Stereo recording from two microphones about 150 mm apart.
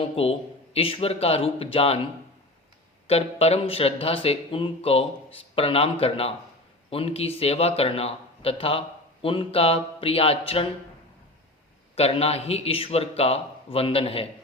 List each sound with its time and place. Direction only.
0.0 s speech: 40° left (ahead or behind)
3.1 s speech: 45° left (ahead or behind)
11.9 s speech: 40° left (ahead or behind)